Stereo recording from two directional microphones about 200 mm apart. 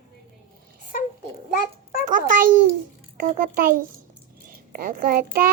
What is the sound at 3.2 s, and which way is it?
Child singing, 45° right (ahead or behind).